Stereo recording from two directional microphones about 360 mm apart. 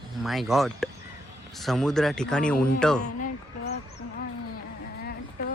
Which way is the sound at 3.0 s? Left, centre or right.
Left.